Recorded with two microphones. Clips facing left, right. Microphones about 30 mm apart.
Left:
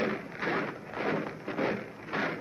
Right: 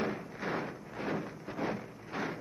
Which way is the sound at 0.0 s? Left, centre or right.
Left.